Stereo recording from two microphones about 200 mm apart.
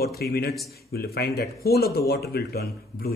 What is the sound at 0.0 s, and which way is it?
Speech, 50° left (ahead or behind).